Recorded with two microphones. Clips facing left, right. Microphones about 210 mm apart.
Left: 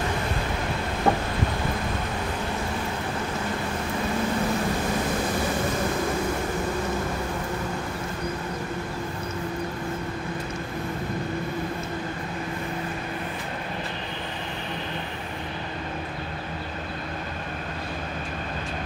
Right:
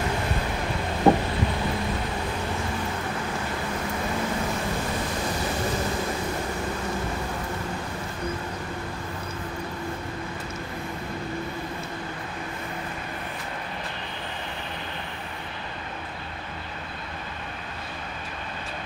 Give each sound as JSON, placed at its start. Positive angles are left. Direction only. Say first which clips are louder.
{"t": 1.1, "sound": "vehicle", "louder": "right 5 dB", "side_deg": -20}